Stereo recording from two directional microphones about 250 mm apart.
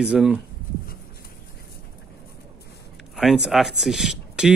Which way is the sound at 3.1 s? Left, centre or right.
Centre.